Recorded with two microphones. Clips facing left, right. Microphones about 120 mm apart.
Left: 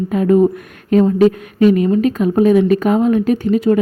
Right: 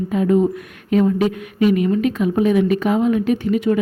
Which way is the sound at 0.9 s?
40° left (ahead or behind).